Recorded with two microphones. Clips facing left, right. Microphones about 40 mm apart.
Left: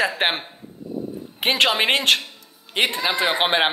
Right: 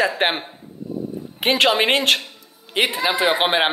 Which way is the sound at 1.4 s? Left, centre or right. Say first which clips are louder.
Right 2 dB; centre.